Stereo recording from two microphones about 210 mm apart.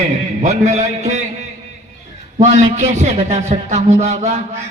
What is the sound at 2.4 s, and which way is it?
A man's voice, 35° right (ahead or behind).